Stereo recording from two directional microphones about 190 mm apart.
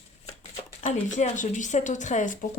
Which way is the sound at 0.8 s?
40° left (ahead or behind).